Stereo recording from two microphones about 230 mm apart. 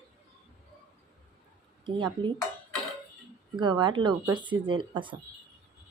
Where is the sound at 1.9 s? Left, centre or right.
Centre.